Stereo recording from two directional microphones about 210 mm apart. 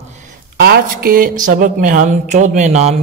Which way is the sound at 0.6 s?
45° right (ahead or behind).